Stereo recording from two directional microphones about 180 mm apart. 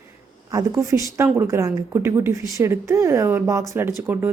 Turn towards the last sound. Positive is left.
turn(degrees=-10)  # may be behind; listen again after turning